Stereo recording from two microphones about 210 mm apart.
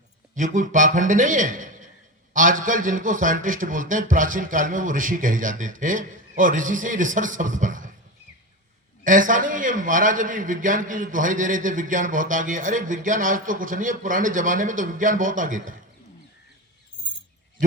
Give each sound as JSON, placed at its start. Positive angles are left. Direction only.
{"t": 0.3, "sound": "a man's voice", "side_deg": -35}
{"t": 9.0, "sound": "a man's voice", "side_deg": -40}